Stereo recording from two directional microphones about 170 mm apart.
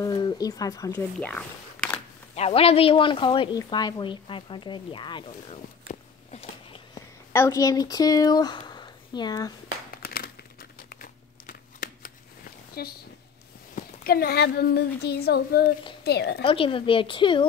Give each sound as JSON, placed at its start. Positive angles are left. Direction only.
{"t": 0.0, "sound": "a woman's voice", "side_deg": 25}
{"t": 1.1, "sound": "speech", "side_deg": 5}
{"t": 2.3, "sound": "a woman's voice", "side_deg": 35}
{"t": 7.3, "sound": "speech", "side_deg": 20}
{"t": 10.0, "sound": "crumpling", "side_deg": 60}
{"t": 12.8, "sound": "a woman's voice", "side_deg": 65}
{"t": 16.4, "sound": "a woman's voice", "side_deg": 30}